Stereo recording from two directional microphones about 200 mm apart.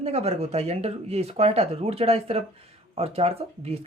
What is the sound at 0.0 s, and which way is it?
Speech, 30° right (ahead or behind).